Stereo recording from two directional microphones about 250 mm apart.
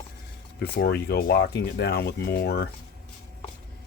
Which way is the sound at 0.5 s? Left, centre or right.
Left.